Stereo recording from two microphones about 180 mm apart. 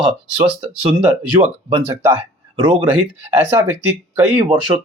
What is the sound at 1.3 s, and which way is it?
Speech, 15° right (ahead or behind).